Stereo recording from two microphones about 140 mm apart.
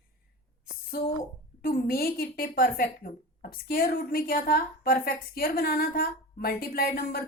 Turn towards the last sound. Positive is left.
turn(degrees=90)